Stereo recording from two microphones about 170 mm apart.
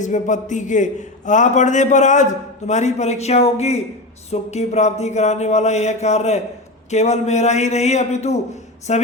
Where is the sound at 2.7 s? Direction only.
45° left (ahead or behind).